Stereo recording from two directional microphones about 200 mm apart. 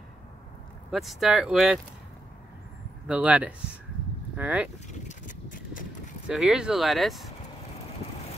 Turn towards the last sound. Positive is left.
turn(degrees=0)  # may be behind; listen again after turning